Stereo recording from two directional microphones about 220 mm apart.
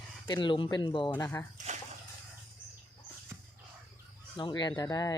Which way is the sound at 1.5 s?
35° right (ahead or behind).